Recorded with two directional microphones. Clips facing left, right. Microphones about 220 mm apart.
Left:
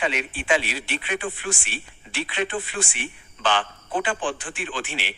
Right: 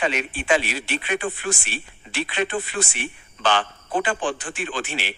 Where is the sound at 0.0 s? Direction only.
45° right (ahead or behind).